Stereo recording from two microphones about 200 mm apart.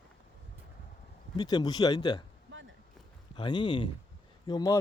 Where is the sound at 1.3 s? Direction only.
20° left (ahead or behind).